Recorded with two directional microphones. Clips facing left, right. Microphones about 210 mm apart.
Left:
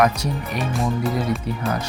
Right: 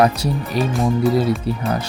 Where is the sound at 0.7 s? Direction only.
Centre (ahead or behind).